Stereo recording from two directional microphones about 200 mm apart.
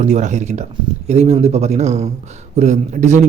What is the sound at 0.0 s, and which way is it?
Speech, 35° right (ahead or behind).